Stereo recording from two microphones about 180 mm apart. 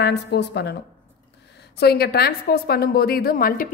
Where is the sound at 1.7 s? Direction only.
65° left (ahead or behind).